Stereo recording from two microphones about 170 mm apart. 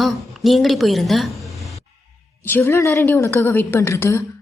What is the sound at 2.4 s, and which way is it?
A woman's voice, 10° left (ahead or behind).